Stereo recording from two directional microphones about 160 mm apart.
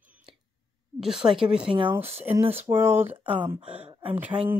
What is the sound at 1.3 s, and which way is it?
Speech, 5° right (ahead or behind).